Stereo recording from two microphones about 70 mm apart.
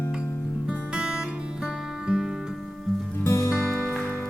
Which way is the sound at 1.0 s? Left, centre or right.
Centre.